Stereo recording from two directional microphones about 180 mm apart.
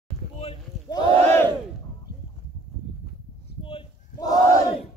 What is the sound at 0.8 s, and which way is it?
Battle cry, 25° left (ahead or behind).